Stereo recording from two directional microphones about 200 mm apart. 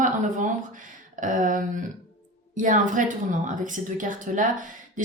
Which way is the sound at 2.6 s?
40° right (ahead or behind).